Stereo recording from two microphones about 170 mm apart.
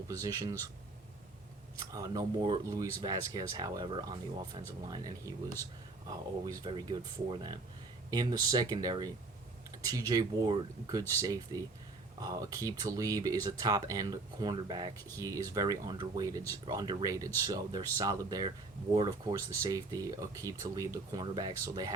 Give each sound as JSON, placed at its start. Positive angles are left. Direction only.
{"t": 0.1, "sound": "speech", "side_deg": -20}
{"t": 1.8, "sound": "speech", "side_deg": -20}